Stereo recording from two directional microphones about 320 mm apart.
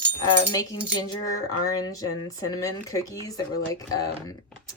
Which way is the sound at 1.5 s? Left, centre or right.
Left.